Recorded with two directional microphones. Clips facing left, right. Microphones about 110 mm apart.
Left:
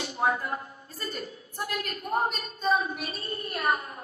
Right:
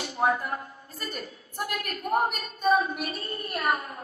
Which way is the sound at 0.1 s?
25° right (ahead or behind).